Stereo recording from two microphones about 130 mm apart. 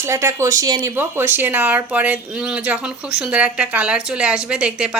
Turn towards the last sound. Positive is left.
turn(degrees=-5)  # may be behind; listen again after turning